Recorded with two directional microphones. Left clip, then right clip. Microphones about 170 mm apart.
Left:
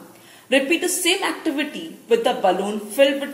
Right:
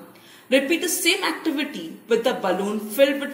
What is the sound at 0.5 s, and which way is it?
A woman's voice, 25° right (ahead or behind).